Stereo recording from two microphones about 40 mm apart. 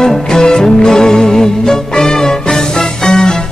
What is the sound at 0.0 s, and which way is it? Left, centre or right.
Music, centre.